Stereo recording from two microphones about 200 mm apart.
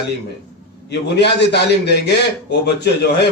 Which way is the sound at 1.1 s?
55° left (ahead or behind).